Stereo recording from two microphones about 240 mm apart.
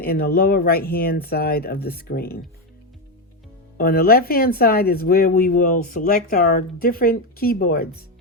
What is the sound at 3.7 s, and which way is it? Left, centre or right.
Speech, left.